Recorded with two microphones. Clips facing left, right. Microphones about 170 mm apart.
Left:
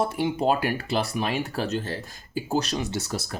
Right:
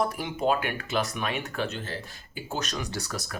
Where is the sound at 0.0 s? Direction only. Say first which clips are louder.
Left 3 dB; 30° left (ahead or behind).